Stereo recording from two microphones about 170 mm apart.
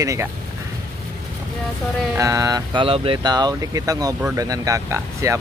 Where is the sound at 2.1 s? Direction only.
20° right (ahead or behind).